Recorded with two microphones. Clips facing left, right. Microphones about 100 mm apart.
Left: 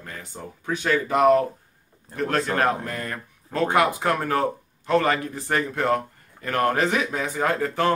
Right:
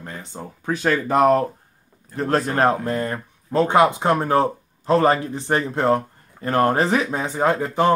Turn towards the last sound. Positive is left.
turn(degrees=-20)  # may be behind; listen again after turning